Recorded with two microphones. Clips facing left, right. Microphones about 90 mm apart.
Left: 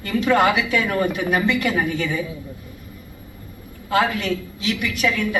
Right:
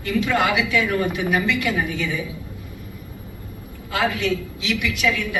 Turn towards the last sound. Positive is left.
turn(degrees=45)  # may be behind; listen again after turning